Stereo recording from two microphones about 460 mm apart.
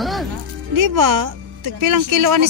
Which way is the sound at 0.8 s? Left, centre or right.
Right.